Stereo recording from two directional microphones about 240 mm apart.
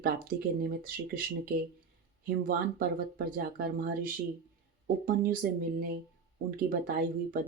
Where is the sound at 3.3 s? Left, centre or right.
Right.